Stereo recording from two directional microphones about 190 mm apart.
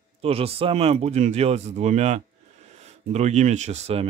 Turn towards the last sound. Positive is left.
turn(degrees=-35)  # may be behind; listen again after turning